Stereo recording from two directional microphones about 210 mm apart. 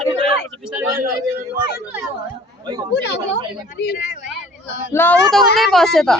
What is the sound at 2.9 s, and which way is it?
A woman's voice, 55° left (ahead or behind).